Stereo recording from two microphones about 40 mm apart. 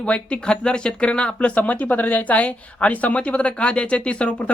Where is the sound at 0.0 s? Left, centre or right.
Left.